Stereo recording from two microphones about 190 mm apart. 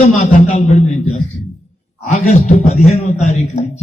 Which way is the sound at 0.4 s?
40° left (ahead or behind).